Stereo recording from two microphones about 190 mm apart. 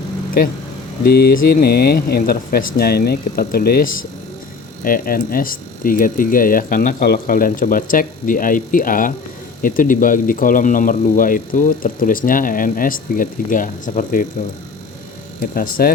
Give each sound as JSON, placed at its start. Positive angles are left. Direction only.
{"t": 1.0, "sound": "speech", "side_deg": 55}
{"t": 15.4, "sound": "speech", "side_deg": 50}